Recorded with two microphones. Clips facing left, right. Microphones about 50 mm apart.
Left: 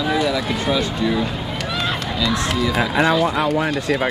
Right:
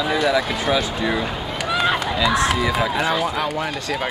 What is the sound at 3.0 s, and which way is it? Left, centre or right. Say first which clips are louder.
Speech: left 4 dB; centre.